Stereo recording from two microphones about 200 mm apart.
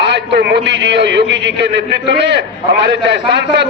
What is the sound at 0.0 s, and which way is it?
A man's voice, 55° right (ahead or behind).